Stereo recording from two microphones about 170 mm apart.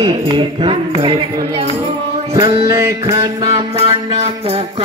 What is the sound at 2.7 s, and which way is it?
Music, 20° right (ahead or behind).